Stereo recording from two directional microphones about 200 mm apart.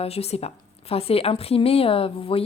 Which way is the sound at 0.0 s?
30° left (ahead or behind).